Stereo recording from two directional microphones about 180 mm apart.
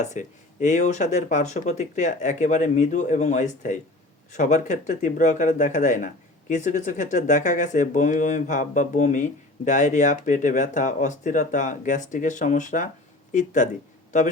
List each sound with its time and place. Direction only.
0.0 s speech: 40° left (ahead or behind)